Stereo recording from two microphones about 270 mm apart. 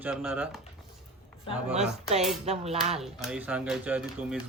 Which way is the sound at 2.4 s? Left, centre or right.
Right.